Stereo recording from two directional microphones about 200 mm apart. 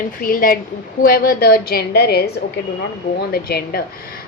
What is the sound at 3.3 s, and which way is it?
Speech, 50° left (ahead or behind).